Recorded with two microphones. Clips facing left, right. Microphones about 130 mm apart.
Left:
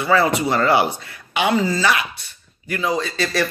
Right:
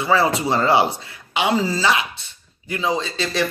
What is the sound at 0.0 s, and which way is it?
Speech, 25° right (ahead or behind).